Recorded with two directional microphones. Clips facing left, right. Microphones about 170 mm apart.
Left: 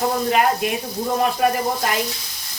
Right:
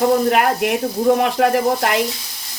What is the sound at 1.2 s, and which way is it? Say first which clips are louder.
Sizzle: right 3 dB; 75° right (ahead or behind).